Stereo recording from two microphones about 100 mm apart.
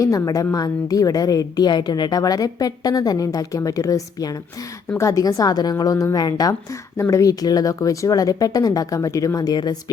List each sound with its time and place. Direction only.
0.0 s a woman's voice: 35° left (ahead or behind)